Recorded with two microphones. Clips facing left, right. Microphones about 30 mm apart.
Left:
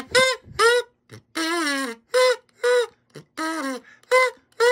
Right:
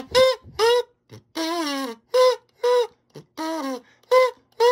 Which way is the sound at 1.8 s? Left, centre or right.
Left.